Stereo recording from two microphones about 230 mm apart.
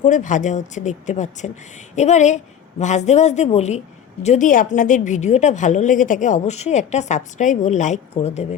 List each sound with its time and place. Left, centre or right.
0.0 s a woman's voice: left